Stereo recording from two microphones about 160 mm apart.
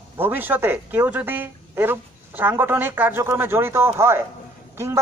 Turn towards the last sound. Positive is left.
turn(degrees=-15)  # may be behind; listen again after turning